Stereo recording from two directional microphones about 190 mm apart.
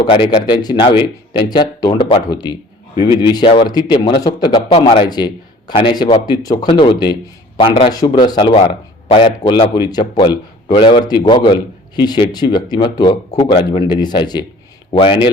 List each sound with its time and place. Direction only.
0.0 s speech: 25° left (ahead or behind)